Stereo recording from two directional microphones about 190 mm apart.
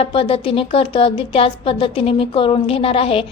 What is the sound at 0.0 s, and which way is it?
A woman's voice, 30° left (ahead or behind).